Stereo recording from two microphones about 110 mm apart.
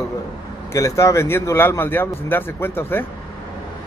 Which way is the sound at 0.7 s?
25° left (ahead or behind).